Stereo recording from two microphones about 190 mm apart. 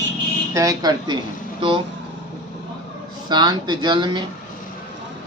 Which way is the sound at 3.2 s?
20° right (ahead or behind).